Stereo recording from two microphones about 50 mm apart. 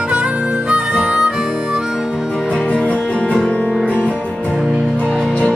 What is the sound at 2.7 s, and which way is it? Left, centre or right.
Music, left.